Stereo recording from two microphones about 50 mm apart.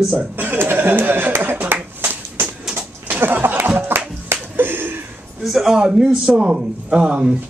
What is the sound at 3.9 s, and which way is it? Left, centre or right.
Music, right.